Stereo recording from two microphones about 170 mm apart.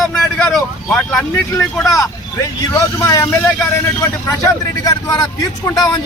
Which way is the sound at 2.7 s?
20° left (ahead or behind).